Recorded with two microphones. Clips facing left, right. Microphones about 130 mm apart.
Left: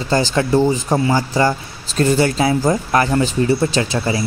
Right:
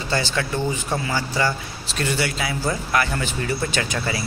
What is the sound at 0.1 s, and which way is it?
Speech, 40° left (ahead or behind).